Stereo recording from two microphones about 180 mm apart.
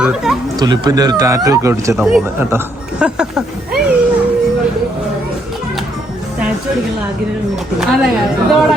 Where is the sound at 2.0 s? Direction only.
Centre (ahead or behind).